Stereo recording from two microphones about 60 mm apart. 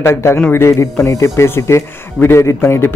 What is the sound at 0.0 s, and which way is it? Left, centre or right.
A man's voice, left.